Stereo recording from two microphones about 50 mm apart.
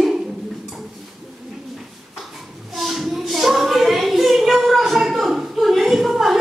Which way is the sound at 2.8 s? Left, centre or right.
Centre.